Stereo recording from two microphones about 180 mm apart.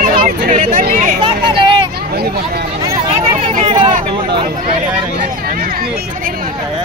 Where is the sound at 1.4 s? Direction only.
25° right (ahead or behind).